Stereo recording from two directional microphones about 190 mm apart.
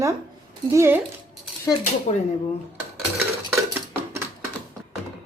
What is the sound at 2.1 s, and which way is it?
Speech, 35° left (ahead or behind).